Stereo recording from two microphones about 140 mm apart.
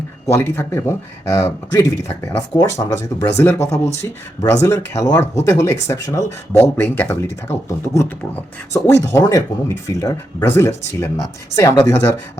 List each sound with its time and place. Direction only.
0.3 s speech: 20° left (ahead or behind)
8.7 s speech: 20° left (ahead or behind)